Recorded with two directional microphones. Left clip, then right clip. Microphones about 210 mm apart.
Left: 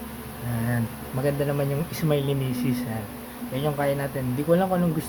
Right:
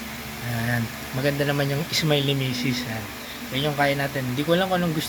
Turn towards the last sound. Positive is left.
turn(degrees=-5)  # may be behind; listen again after turning